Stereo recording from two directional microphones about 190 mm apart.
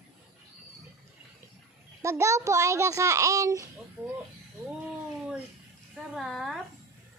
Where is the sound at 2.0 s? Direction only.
15° right (ahead or behind).